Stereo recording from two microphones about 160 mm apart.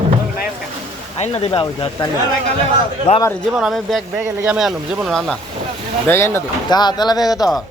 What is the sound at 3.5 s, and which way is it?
Speech, 5° right (ahead or behind).